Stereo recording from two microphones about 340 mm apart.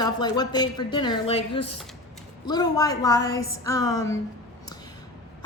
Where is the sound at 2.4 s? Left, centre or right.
Centre.